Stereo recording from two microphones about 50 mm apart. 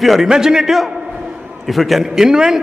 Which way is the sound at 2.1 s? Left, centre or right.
Centre.